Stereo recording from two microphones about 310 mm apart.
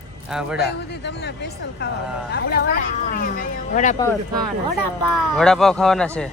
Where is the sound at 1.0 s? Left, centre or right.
Left.